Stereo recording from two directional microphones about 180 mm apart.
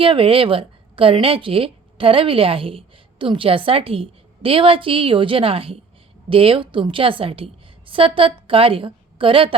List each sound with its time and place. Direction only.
0.0 s a woman's voice: 30° right (ahead or behind)